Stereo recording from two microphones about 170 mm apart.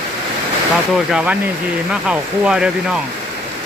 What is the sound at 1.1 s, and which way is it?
Speech, 5° right (ahead or behind).